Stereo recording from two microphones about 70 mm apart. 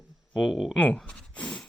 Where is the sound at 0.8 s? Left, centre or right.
Centre.